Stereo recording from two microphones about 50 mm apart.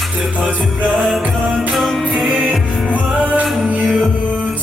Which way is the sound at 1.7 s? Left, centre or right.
Centre.